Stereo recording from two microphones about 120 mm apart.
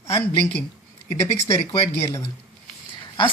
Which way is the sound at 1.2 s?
25° left (ahead or behind).